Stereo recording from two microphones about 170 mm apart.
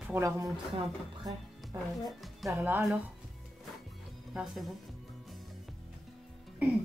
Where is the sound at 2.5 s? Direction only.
15° right (ahead or behind).